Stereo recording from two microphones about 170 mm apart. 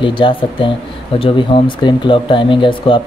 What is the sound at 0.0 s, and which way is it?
Speech, 30° left (ahead or behind).